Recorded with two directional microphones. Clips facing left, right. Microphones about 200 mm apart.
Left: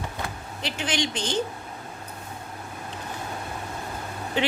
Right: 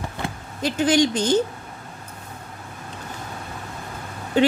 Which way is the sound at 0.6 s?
40° right (ahead or behind).